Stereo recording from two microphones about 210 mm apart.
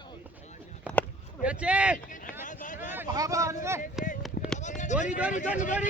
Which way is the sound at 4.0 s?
Centre (ahead or behind).